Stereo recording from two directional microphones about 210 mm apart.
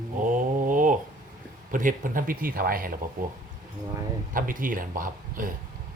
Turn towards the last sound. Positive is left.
turn(degrees=-40)  # may be behind; listen again after turning